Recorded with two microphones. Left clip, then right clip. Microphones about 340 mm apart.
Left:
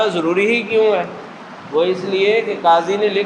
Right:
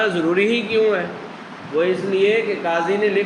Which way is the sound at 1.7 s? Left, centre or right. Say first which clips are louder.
Left 2 dB; centre.